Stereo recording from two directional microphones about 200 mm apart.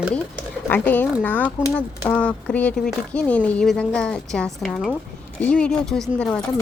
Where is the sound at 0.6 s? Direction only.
10° left (ahead or behind).